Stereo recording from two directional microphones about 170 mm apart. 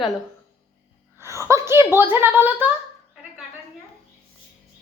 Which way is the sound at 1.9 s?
15° right (ahead or behind).